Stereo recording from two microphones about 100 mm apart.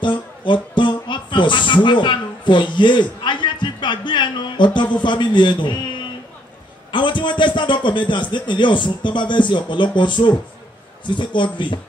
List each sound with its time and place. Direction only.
0.0 s a man's voice: 55° left (ahead or behind)